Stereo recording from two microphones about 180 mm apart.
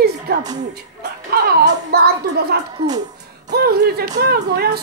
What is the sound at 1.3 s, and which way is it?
Speech, 60° right (ahead or behind).